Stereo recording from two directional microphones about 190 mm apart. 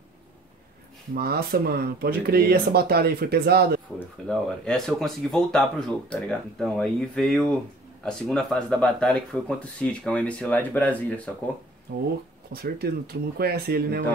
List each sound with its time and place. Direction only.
1.1 s speech: 55° right (ahead or behind)
4.3 s speech: centre (ahead or behind)
11.9 s speech: 60° right (ahead or behind)